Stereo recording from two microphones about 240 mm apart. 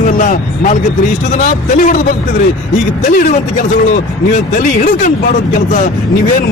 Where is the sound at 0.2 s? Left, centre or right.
Left.